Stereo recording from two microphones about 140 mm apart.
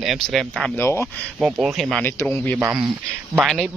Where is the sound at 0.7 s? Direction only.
20° left (ahead or behind).